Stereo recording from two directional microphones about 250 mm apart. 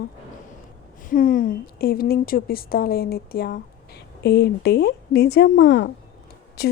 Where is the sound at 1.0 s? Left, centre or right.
Left.